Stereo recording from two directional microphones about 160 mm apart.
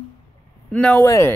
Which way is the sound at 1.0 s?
20° left (ahead or behind).